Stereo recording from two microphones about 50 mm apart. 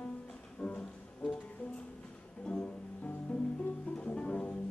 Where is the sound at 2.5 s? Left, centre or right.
Left.